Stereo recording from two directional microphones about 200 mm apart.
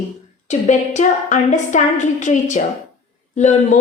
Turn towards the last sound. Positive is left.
turn(degrees=35)  # may be behind; listen again after turning